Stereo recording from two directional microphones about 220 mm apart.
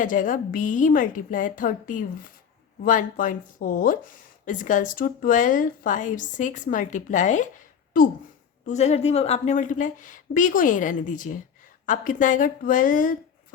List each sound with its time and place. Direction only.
0.0 s speech: 35° left (ahead or behind)
8.6 s speech: 30° left (ahead or behind)